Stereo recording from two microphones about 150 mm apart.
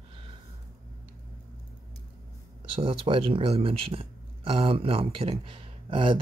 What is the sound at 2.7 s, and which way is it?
Speech, 35° right (ahead or behind).